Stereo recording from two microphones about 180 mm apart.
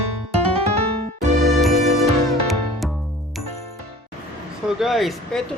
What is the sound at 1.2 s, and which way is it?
Music, 40° right (ahead or behind).